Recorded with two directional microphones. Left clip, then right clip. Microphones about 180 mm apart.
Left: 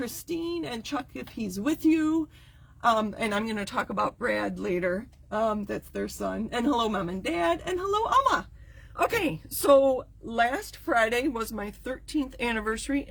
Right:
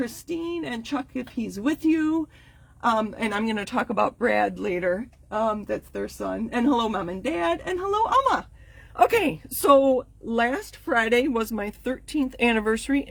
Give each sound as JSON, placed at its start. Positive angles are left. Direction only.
{"t": 0.0, "sound": "speech", "side_deg": -25}
{"t": 9.0, "sound": "a woman's voice", "side_deg": -45}